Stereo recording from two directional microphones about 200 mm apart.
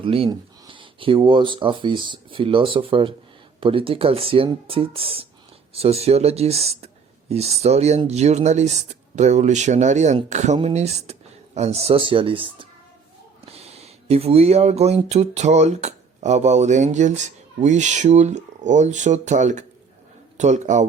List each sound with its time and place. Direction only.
0.0 s a man's voice: 25° right (ahead or behind)